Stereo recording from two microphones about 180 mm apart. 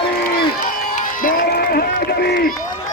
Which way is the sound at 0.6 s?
50° left (ahead or behind).